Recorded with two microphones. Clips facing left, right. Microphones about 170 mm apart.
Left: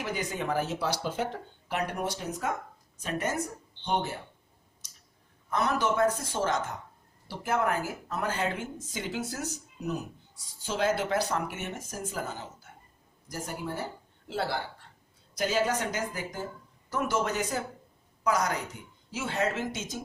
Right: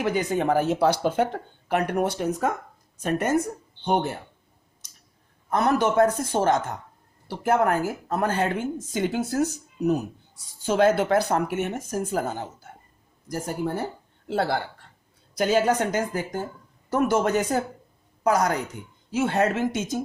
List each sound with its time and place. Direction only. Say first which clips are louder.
0.0 s a woman's voice: right 9 dB; 55° right (ahead or behind)
5.5 s a woman's voice: right 6 dB; 55° right (ahead or behind)